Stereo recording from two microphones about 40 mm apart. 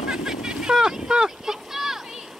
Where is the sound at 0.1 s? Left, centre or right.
Centre.